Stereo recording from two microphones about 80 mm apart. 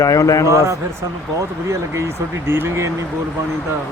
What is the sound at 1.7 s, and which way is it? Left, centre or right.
Speech, right.